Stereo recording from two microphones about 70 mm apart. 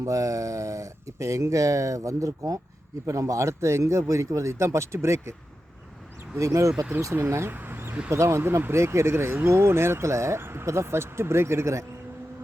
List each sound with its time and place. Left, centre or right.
0.0 s speech: right
6.4 s speech: right